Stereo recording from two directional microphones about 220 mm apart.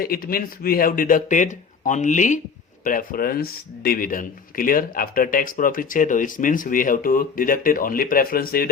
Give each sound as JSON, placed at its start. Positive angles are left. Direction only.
{"t": 0.0, "sound": "speech", "side_deg": 40}